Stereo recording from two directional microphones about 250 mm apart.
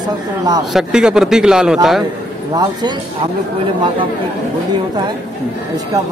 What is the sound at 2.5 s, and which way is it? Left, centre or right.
Speech, centre.